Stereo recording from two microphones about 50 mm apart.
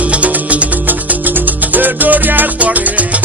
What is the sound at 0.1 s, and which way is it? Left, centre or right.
Music, right.